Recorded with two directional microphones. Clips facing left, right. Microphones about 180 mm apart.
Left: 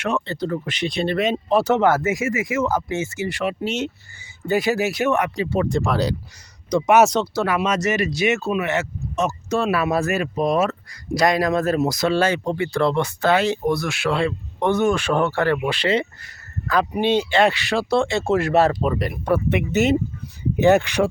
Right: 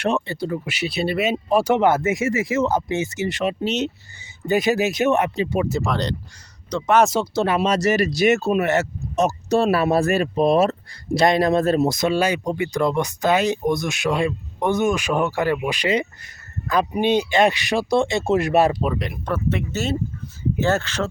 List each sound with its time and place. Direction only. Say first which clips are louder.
0.3 s speech: left 1 dB; 10° right (ahead or behind)
2.2 s speech: right 1 dB; 30° right (ahead or behind)
5.6 s speech: left 2 dB; centre (ahead or behind)
7.3 s speech: right 2 dB; 25° right (ahead or behind)
18.8 s speech: left 2 dB; centre (ahead or behind); by 21.1 s 15° left (ahead or behind)